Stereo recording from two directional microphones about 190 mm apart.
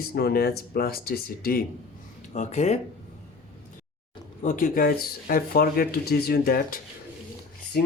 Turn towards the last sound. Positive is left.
turn(degrees=55)  # may be behind; listen again after turning